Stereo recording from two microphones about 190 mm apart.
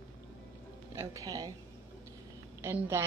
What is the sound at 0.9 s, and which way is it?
Speech, 15° right (ahead or behind).